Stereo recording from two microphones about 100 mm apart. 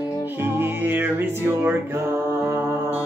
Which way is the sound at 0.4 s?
20° right (ahead or behind).